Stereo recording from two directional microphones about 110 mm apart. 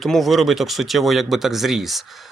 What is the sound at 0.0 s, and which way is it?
Speech, centre (ahead or behind).